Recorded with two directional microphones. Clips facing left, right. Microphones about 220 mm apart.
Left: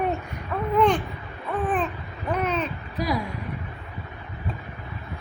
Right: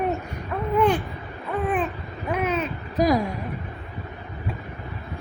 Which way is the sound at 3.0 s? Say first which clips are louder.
Right 7 dB; 45° right (ahead or behind).